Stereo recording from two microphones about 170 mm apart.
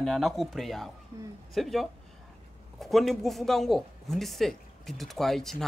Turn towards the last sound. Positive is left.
turn(degrees=0)  # may be behind; listen again after turning